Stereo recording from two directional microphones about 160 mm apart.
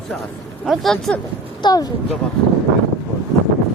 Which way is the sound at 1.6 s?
25° left (ahead or behind).